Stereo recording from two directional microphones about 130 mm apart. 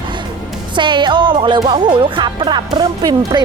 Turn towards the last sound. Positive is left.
turn(degrees=-30)  # may be behind; listen again after turning